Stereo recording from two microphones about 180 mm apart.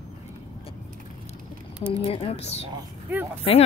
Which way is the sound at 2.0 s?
35° left (ahead or behind).